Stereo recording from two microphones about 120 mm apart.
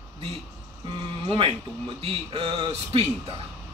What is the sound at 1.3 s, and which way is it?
A man's voice, 50° right (ahead or behind).